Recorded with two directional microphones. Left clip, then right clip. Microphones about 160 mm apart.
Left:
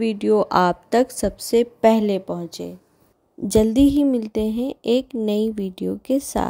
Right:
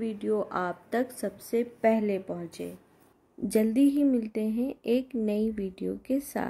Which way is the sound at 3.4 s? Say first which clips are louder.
Left 8 dB; 40° left (ahead or behind).